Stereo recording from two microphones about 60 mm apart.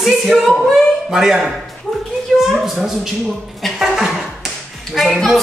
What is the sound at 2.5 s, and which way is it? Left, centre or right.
Speech, centre.